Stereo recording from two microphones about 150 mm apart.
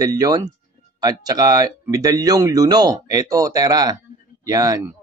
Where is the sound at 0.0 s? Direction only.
25° right (ahead or behind).